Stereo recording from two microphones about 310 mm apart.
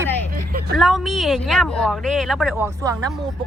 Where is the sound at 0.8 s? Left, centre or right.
Centre.